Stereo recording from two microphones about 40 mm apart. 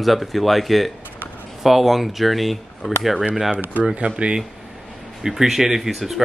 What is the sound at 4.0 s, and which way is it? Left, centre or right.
Speech, right.